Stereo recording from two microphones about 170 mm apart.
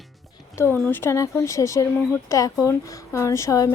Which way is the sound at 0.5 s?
15° left (ahead or behind).